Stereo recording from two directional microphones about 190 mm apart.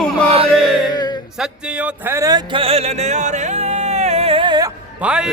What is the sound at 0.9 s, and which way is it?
Music, 20° left (ahead or behind).